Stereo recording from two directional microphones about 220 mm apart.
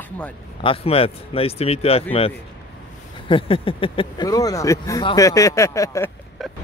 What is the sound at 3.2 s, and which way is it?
Speech, 25° left (ahead or behind).